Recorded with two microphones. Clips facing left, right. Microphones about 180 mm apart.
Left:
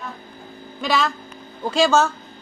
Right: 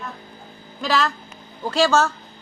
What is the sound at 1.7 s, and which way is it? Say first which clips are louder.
Speech: left 1 dB; 15° left (ahead or behind).